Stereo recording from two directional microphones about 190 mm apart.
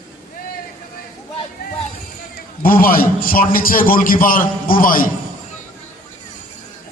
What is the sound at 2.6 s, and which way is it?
A man's voice, 50° left (ahead or behind).